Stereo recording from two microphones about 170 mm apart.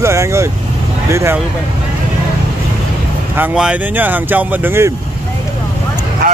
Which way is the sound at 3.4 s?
5° right (ahead or behind).